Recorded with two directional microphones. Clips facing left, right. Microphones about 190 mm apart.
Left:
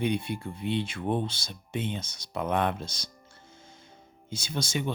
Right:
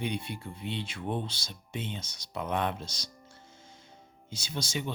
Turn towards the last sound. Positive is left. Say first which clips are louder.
# left 4 dB
turn(degrees=55)  # may be behind; listen again after turning